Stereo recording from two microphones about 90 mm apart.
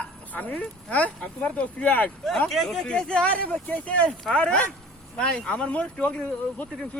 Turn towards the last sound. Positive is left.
turn(degrees=15)  # may be behind; listen again after turning